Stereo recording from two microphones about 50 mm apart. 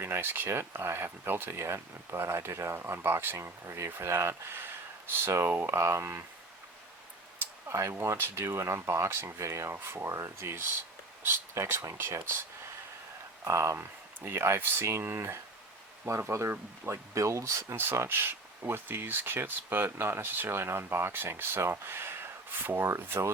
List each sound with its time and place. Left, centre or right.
0.0 s speech: right
5.7 s speech: right
7.7 s speech: right
8.0 s speech: right
13.4 s speech: right
14.3 s speech: right
16.0 s speech: right
16.5 s speech: right
17.2 s speech: right
17.7 s speech: right